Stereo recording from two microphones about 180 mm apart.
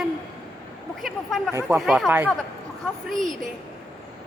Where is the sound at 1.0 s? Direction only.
Centre (ahead or behind).